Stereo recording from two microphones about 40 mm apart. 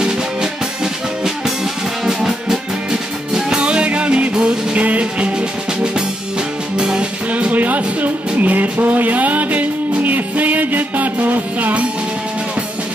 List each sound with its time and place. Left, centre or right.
1.2 s music: centre
4.7 s music: right
6.8 s music: right
7.2 s music: right